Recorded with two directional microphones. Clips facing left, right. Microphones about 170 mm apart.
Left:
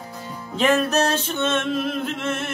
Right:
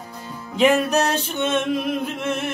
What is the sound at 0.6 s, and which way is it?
Music, 15° right (ahead or behind).